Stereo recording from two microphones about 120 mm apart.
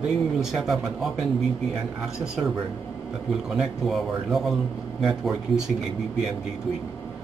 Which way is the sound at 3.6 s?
Centre (ahead or behind).